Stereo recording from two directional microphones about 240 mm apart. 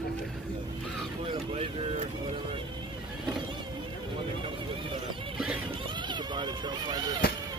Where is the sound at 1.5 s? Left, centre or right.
Right.